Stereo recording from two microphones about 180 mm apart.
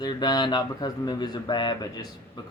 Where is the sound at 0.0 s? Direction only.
25° left (ahead or behind).